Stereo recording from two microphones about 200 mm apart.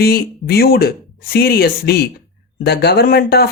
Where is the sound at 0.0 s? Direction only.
50° left (ahead or behind).